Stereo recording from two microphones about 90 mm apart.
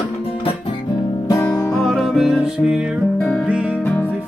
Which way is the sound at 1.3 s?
40° left (ahead or behind).